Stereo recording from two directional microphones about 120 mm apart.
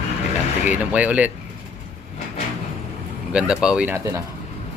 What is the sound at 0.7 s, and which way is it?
Speech, 10° right (ahead or behind).